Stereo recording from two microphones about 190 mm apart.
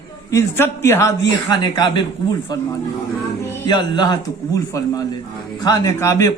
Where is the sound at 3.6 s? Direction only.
20° left (ahead or behind).